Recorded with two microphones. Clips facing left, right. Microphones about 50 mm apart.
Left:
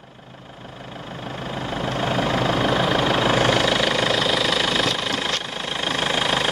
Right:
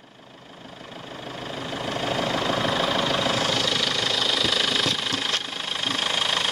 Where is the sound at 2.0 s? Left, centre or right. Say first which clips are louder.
Left 3 dB; left.